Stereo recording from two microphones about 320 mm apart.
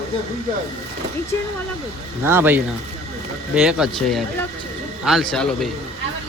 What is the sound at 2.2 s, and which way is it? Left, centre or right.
Speech, centre.